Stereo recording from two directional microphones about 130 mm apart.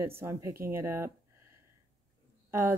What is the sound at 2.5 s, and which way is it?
Speech, 20° right (ahead or behind).